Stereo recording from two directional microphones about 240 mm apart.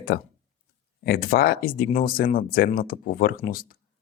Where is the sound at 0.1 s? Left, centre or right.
Left.